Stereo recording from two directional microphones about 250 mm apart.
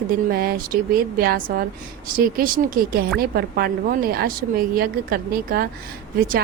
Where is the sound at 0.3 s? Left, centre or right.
Right.